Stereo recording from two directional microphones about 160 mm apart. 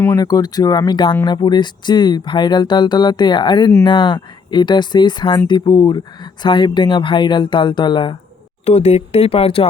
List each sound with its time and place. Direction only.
0.0 s speech: 20° left (ahead or behind)
8.6 s speech: 40° left (ahead or behind)